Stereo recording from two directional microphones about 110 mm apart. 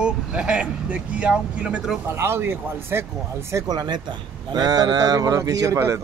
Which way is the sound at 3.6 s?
40° right (ahead or behind).